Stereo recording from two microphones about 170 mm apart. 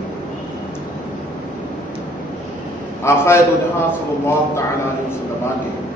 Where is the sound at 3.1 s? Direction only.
15° left (ahead or behind).